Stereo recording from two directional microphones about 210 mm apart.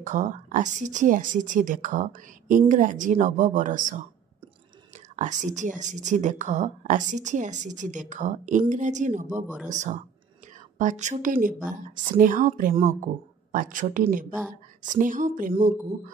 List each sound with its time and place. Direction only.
0.0 s a woman's voice: 35° right (ahead or behind)
5.1 s a woman's voice: 35° right (ahead or behind)